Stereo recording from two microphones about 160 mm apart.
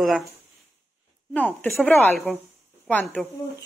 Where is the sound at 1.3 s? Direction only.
10° left (ahead or behind).